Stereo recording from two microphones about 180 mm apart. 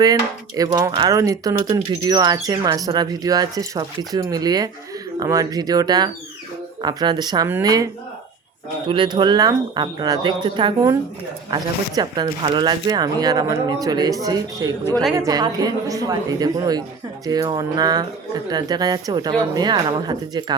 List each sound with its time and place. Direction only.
0.0 s speech: 20° right (ahead or behind)
8.9 s speech: 25° right (ahead or behind)